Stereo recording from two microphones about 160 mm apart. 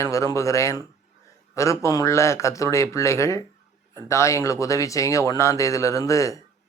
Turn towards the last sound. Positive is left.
turn(degrees=20)  # may be behind; listen again after turning